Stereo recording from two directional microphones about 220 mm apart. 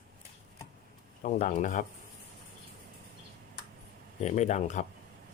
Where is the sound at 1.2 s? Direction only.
35° left (ahead or behind).